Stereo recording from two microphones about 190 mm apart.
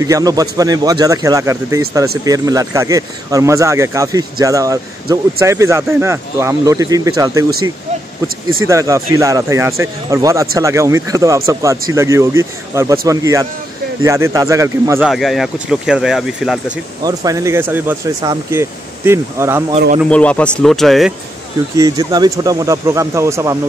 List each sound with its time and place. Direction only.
0.0 s a man's voice: 20° right (ahead or behind)
8.6 s speech: 15° right (ahead or behind)
15.0 s speech: centre (ahead or behind)
17.0 s speech: 20° right (ahead or behind)
20.1 s speech: 5° left (ahead or behind)
21.7 s speech: 20° right (ahead or behind)